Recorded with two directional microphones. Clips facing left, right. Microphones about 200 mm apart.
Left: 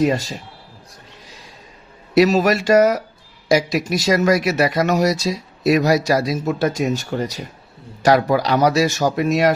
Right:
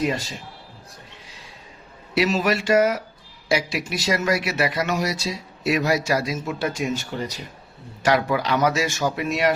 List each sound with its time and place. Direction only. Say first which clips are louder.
2.1 s speech: left 7 dB; 40° left (ahead or behind)